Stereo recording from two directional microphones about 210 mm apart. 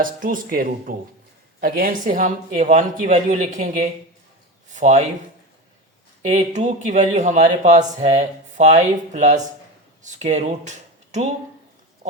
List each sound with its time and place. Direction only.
0.0 s a man's voice: 40° right (ahead or behind)
6.2 s a man's voice: 35° right (ahead or behind)